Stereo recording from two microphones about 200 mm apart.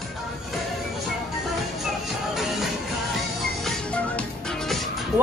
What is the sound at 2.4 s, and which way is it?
Music, centre (ahead or behind).